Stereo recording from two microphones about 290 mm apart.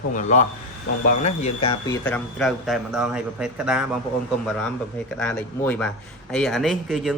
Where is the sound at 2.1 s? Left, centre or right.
Centre.